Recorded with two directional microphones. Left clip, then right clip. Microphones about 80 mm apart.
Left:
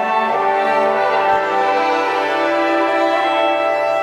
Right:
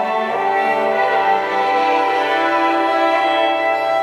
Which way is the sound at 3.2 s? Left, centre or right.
Left.